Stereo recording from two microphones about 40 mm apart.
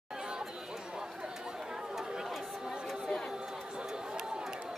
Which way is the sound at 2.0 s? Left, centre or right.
Centre.